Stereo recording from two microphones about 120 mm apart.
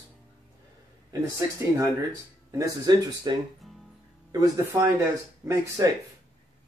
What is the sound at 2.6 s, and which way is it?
Speech, 35° right (ahead or behind).